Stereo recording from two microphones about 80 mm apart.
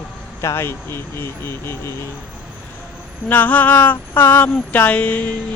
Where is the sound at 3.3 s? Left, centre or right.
Left.